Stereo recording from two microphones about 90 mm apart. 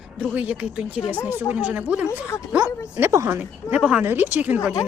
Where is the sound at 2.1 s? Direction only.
30° left (ahead or behind).